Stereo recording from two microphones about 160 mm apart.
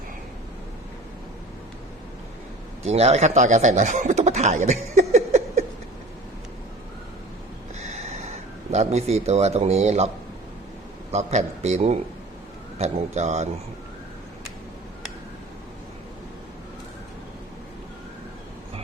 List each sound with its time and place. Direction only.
2.8 s speech: 40° right (ahead or behind)
7.9 s speech: 45° right (ahead or behind)
11.1 s a man's voice: 45° right (ahead or behind)